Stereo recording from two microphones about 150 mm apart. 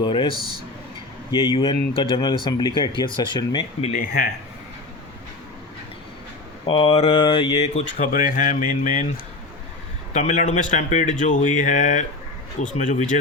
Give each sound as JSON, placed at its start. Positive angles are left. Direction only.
{"t": 0.0, "sound": "speech", "side_deg": 35}
{"t": 3.9, "sound": "speech", "side_deg": 70}
{"t": 6.7, "sound": "speech", "side_deg": 40}
{"t": 7.6, "sound": "speech", "side_deg": 50}
{"t": 10.1, "sound": "speech", "side_deg": 55}